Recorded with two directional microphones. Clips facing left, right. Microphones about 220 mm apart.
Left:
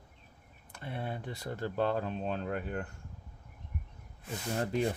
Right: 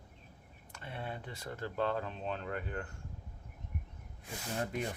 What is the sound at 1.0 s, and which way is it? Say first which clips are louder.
Speech: left 4 dB; 40° left (ahead or behind).